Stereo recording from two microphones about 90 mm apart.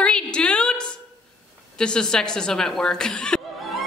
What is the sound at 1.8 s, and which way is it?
A man's voice, 10° left (ahead or behind).